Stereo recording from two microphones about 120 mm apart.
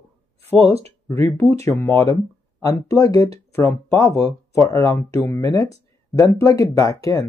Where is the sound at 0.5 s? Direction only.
55° right (ahead or behind).